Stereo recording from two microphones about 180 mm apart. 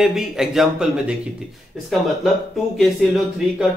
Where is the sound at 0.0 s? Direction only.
Centre (ahead or behind).